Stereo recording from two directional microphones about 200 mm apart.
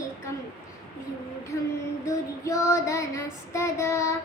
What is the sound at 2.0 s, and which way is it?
Child singing, 15° left (ahead or behind).